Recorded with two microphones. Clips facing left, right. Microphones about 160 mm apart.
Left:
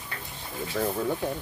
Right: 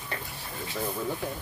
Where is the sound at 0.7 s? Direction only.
60° left (ahead or behind).